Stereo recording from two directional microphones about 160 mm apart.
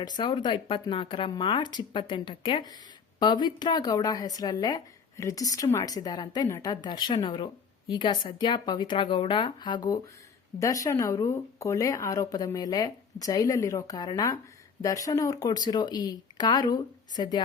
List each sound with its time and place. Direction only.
0.0 s a woman's voice: 25° left (ahead or behind)